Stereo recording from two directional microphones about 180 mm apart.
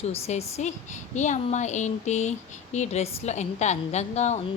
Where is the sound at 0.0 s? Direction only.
35° left (ahead or behind).